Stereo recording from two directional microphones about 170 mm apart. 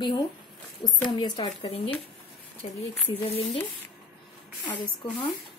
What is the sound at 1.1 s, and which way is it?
Speech, 25° left (ahead or behind).